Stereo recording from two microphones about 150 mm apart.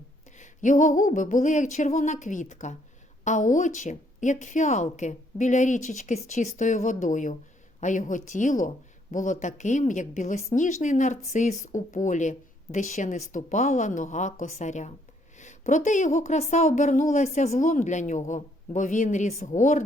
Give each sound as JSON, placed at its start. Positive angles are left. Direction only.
{"t": 0.3, "sound": "a woman's voice", "side_deg": 55}